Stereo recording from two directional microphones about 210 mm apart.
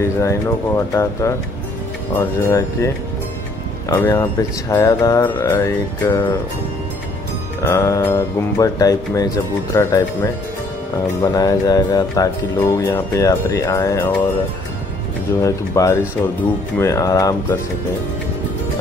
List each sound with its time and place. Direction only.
0.2 s speech: 15° left (ahead or behind)
3.9 s speech: 15° left (ahead or behind)
7.6 s speech: 15° left (ahead or behind)
11.3 s speech: 15° left (ahead or behind)
15.4 s speech: 15° left (ahead or behind)